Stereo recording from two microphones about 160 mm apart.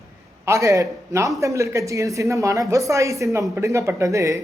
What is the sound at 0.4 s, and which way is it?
A woman's voice, 20° right (ahead or behind).